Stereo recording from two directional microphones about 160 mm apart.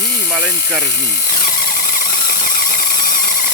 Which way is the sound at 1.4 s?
65° left (ahead or behind).